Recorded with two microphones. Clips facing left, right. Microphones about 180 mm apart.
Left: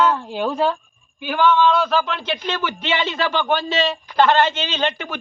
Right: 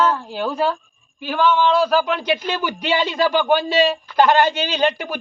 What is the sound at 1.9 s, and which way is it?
Speech, 10° right (ahead or behind).